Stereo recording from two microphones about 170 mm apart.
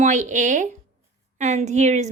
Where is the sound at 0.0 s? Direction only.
45° right (ahead or behind).